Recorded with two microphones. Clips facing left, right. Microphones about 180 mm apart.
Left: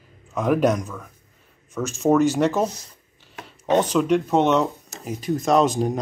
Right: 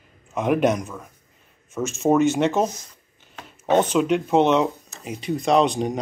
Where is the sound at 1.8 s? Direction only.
Centre (ahead or behind).